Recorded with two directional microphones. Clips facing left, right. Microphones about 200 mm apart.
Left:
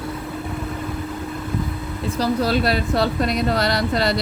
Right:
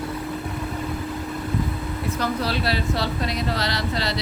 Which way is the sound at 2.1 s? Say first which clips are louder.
Left 7 dB; 40° left (ahead or behind).